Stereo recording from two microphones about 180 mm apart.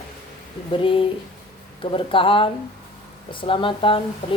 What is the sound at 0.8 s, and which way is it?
Speech, 30° left (ahead or behind).